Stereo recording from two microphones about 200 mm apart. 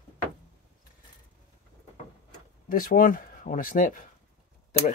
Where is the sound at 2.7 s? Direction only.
45° left (ahead or behind).